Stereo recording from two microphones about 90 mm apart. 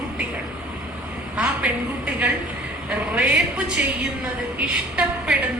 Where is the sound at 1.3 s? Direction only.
15° right (ahead or behind).